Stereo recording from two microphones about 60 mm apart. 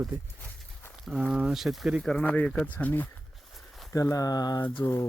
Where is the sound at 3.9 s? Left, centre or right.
Left.